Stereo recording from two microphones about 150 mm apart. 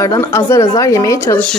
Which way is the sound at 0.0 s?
20° left (ahead or behind).